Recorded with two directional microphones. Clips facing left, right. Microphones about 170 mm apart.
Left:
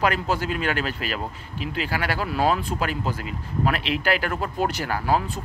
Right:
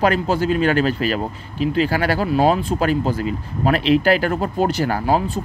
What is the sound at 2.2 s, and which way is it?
Speech, 25° right (ahead or behind).